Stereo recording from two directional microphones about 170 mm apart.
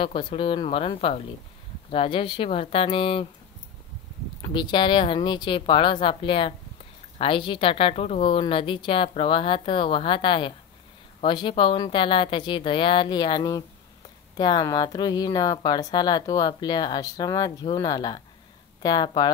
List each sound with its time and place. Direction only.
0.0 s speech: 30° left (ahead or behind)
4.4 s speech: 25° left (ahead or behind)